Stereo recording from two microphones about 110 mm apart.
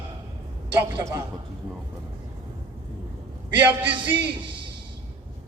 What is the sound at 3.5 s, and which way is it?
Speech, 15° right (ahead or behind).